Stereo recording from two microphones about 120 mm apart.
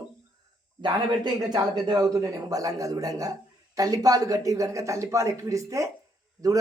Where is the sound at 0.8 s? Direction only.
35° right (ahead or behind).